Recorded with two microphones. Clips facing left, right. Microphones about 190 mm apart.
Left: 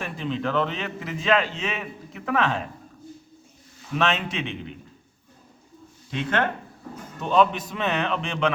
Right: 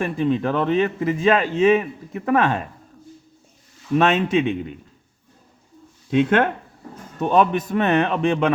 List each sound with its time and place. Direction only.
0.0 s a man's voice: 55° right (ahead or behind)
3.9 s a man's voice: 50° right (ahead or behind)
6.1 s a man's voice: 55° right (ahead or behind)